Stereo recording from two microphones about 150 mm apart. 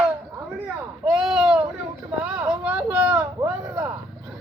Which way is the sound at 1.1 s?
5° right (ahead or behind).